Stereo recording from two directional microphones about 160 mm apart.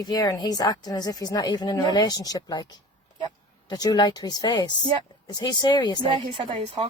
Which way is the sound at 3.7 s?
25° left (ahead or behind).